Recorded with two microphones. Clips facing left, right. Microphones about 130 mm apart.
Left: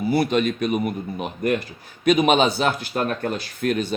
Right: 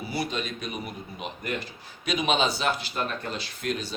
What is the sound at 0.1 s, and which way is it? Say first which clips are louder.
Speech: left 11 dB; 55° left (ahead or behind).